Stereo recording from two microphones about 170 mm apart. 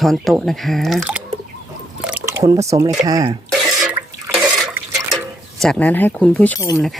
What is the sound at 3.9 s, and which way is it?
Water, 10° right (ahead or behind).